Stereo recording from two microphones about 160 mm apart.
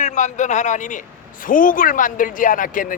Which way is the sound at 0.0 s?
50° left (ahead or behind).